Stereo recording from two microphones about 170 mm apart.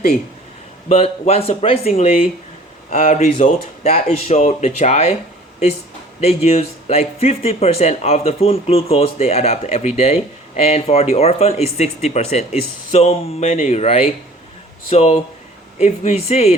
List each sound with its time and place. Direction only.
0.9 s speech: 40° left (ahead or behind)
2.9 s speech: 40° left (ahead or behind)
6.1 s speech: 40° left (ahead or behind)